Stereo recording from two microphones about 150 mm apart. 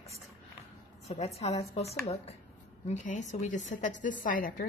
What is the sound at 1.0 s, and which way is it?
A woman's voice, 45° left (ahead or behind).